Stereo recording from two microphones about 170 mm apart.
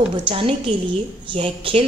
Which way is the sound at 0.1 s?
30° right (ahead or behind).